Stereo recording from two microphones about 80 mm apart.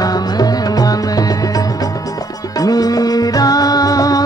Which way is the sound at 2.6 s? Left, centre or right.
Left.